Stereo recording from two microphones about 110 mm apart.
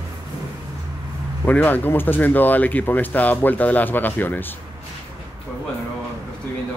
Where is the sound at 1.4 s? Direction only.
15° left (ahead or behind).